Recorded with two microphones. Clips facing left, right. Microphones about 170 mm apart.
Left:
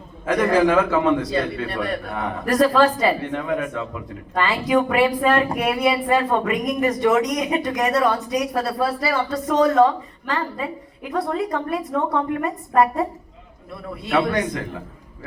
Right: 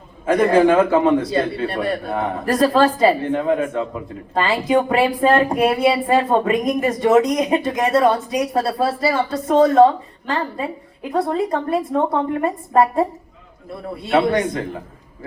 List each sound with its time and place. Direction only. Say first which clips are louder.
0.3 s a man's voice: right 4 dB; 25° right (ahead or behind)
11.1 s a man's voice: right 3 dB; 25° right (ahead or behind)